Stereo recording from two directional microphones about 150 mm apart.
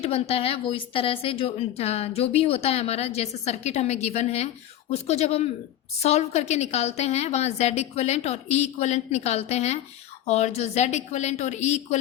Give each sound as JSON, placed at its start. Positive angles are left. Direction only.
{"t": 0.0, "sound": "a woman's voice", "side_deg": 40}